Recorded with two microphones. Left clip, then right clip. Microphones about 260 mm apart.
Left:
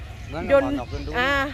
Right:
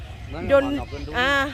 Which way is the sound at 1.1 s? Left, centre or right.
Centre.